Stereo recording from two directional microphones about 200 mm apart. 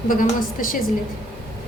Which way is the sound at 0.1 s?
45° left (ahead or behind).